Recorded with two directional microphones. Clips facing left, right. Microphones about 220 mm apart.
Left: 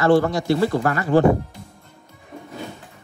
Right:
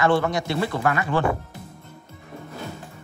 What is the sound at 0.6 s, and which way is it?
Speech, 40° left (ahead or behind).